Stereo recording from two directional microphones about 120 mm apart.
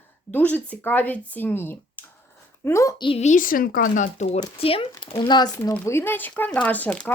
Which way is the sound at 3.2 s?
75° left (ahead or behind).